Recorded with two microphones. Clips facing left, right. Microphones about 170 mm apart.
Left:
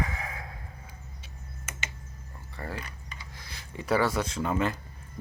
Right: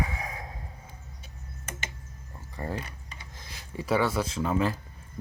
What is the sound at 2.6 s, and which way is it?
Speech, 20° right (ahead or behind).